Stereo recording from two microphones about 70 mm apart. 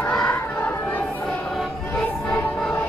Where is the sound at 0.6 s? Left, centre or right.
Left.